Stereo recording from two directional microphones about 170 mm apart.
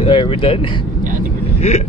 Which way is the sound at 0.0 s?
30° left (ahead or behind).